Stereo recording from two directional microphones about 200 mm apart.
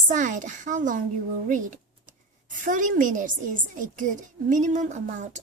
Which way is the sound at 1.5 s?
40° right (ahead or behind).